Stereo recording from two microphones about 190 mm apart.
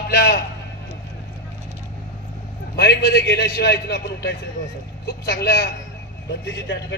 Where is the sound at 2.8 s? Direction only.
60° left (ahead or behind).